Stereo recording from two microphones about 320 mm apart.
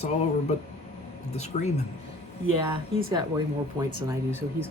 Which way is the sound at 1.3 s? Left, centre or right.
Left.